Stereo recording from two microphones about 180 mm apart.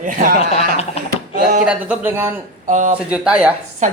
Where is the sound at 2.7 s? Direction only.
45° right (ahead or behind).